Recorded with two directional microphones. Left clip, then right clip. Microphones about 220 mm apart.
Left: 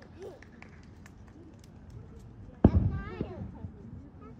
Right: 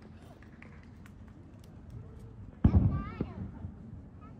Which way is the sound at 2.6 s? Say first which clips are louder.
Left 5 dB; 45° left (ahead or behind).